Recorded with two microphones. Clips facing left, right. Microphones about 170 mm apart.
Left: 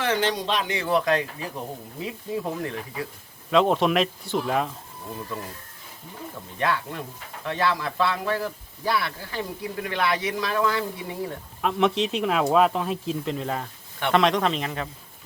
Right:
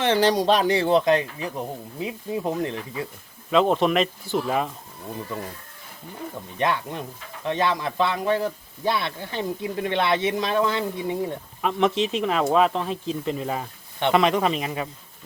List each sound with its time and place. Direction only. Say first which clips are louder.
0.0 s speech: right 5 dB; 35° right (ahead or behind)
3.5 s speech: right 1 dB; centre (ahead or behind)
6.6 s speech: right 1 dB; 20° right (ahead or behind)
11.6 s speech: right 1 dB; centre (ahead or behind)